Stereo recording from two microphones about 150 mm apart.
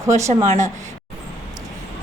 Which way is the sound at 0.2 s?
20° right (ahead or behind).